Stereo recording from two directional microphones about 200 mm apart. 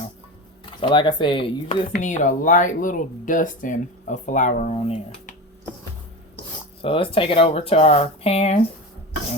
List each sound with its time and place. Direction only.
0.6 s speech: 25° left (ahead or behind)
1.9 s speech: 35° left (ahead or behind)
6.8 s speech: 25° left (ahead or behind)